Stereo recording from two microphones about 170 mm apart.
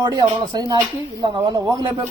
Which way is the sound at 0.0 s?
25° right (ahead or behind).